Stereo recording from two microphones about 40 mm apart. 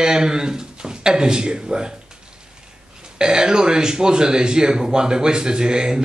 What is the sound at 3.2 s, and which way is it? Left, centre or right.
A man's voice, centre.